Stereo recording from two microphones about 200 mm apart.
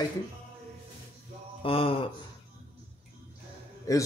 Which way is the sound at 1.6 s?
30° left (ahead or behind).